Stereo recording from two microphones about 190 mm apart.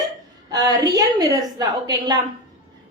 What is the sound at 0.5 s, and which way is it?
Speech, 20° right (ahead or behind).